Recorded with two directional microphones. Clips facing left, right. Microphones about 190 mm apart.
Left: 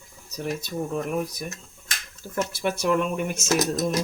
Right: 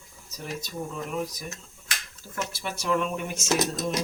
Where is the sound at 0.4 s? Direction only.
60° left (ahead or behind).